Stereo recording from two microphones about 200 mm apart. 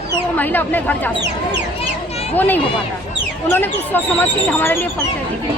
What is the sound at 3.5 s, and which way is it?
Speech, 10° left (ahead or behind).